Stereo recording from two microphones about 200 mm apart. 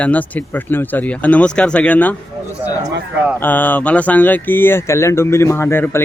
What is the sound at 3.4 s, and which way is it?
Speech, 10° left (ahead or behind).